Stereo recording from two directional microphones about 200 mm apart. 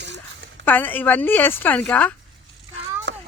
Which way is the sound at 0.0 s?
60° right (ahead or behind).